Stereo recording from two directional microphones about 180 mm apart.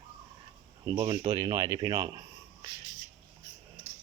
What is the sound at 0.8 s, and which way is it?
Speech, 20° right (ahead or behind).